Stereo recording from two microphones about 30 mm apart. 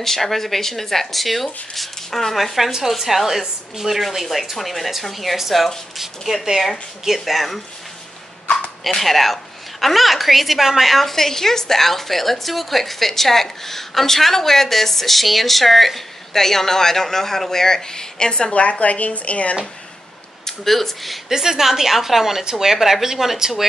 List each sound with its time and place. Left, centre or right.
0.0 s a woman's voice: centre
9.0 s a woman's voice: centre
18.5 s speech: left
20.4 s speech: centre
21.3 s a woman's voice: centre
22.4 s speech: right
22.7 s a woman's voice: centre